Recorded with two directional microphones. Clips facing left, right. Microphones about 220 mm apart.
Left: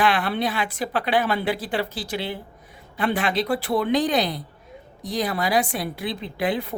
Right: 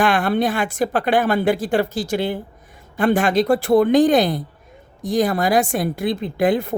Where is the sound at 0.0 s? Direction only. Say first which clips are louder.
Right 5 dB; 45° right (ahead or behind).